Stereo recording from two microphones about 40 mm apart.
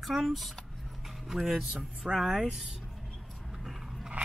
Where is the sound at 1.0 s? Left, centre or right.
Centre.